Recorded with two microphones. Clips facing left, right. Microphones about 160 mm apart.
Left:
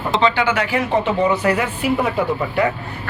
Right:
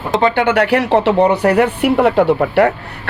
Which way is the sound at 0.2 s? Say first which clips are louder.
Right 5 dB; 55° right (ahead or behind).